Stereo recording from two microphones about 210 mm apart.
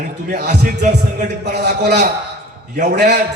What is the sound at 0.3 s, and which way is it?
Speech, 50° right (ahead or behind).